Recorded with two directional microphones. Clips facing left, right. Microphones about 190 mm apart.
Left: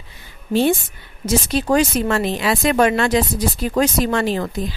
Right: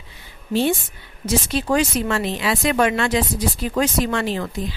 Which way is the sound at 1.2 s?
45° left (ahead or behind).